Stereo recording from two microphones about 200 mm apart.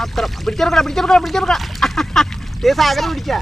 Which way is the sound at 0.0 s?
Centre (ahead or behind).